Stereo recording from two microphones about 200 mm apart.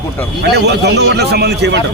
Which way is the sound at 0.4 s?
55° right (ahead or behind).